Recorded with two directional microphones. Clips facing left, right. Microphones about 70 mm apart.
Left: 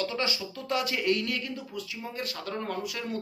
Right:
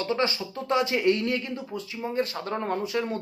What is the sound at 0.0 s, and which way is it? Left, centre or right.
Speech, right.